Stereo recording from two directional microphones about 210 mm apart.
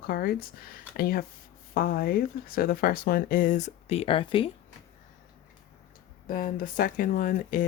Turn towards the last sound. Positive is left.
turn(degrees=40)  # may be behind; listen again after turning